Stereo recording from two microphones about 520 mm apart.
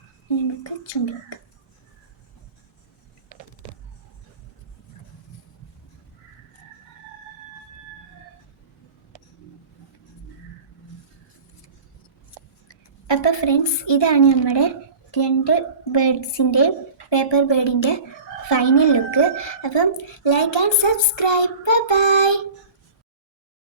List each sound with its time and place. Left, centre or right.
12.6 s a woman's voice: left
18.5 s speech: left
18.9 s a woman's voice: left